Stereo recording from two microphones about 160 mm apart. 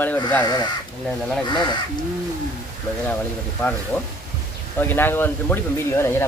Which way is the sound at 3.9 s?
5° left (ahead or behind).